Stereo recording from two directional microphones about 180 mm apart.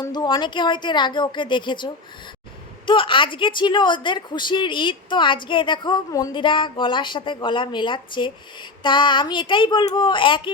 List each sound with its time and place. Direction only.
0.0 s a woman's voice: 25° left (ahead or behind)